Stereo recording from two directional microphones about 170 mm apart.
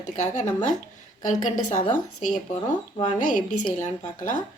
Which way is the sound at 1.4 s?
50° left (ahead or behind).